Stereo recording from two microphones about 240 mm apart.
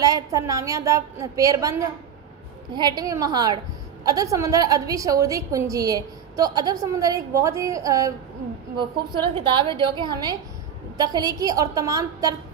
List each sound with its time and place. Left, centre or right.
0.0 s a woman's voice: centre